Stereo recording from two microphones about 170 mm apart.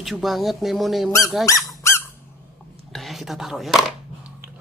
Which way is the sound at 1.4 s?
20° left (ahead or behind).